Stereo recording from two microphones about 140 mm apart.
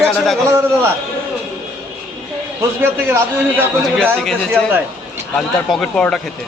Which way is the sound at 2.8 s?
15° right (ahead or behind).